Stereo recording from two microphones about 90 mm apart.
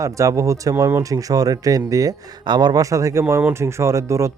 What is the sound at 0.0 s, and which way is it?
Speech, 35° right (ahead or behind).